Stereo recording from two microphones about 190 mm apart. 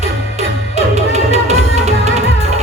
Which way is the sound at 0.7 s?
35° right (ahead or behind).